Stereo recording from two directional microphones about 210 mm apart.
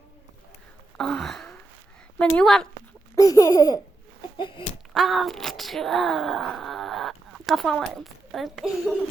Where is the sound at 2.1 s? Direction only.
5° left (ahead or behind).